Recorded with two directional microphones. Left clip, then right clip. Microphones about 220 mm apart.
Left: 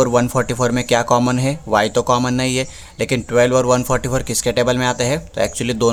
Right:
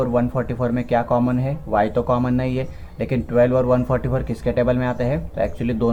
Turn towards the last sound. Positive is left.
turn(degrees=40)  # may be behind; listen again after turning